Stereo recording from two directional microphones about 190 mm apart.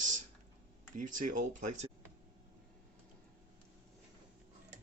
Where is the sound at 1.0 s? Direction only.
45° right (ahead or behind).